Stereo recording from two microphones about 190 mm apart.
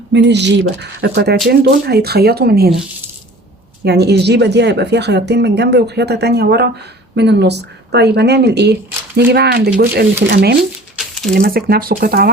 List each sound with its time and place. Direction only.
0.1 s speech: 65° right (ahead or behind)
3.8 s speech: 60° right (ahead or behind)
10.9 s a sound: centre (ahead or behind)
11.3 s speech: 55° right (ahead or behind)